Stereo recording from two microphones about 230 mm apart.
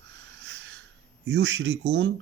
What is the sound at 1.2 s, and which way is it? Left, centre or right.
Speech, right.